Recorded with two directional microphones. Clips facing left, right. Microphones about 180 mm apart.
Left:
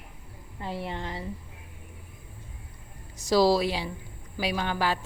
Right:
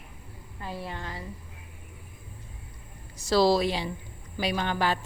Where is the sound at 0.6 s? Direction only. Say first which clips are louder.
Left 3 dB; 25° left (ahead or behind).